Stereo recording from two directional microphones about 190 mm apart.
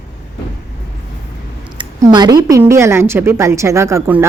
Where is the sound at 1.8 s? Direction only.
20° right (ahead or behind).